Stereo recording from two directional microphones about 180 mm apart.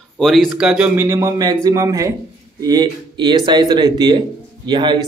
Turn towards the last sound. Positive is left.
turn(degrees=-25)  # may be behind; listen again after turning